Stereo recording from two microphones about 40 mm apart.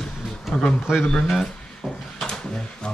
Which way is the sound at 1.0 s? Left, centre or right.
Centre.